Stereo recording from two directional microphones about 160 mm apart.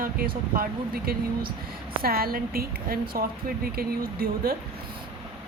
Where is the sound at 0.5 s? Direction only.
65° right (ahead or behind).